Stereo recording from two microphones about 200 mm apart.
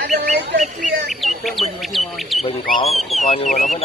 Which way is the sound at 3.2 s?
30° left (ahead or behind).